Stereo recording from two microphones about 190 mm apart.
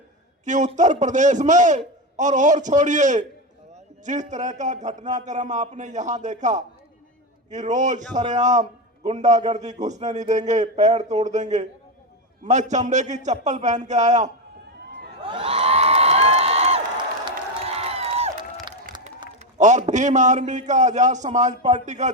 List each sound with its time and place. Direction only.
0.4 s a man's voice: 40° right (ahead or behind)
15.2 s a sound: 30° right (ahead or behind)
17.2 s crowd: 30° right (ahead or behind)
19.5 s a man's voice: 40° right (ahead or behind)